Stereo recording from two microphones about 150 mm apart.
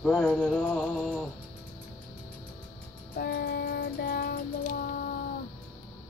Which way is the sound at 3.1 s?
85° left.